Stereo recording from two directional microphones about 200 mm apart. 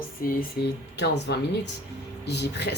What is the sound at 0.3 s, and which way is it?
A woman's voice, 50° left (ahead or behind).